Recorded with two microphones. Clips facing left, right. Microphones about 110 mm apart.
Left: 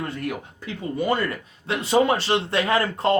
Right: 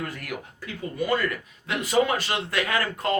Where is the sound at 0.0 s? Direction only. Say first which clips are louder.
Left 4 dB; 30° left (ahead or behind).